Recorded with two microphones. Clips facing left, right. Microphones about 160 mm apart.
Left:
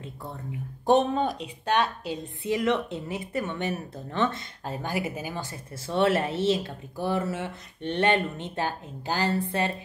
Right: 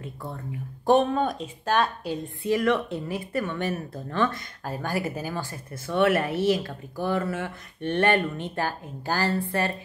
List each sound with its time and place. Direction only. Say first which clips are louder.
0.8 s speech: right 1 dB; 20° left (ahead or behind)
1.3 s speech: right 1 dB; 40° right (ahead or behind)
2.0 s speech: right 3 dB; 20° left (ahead or behind)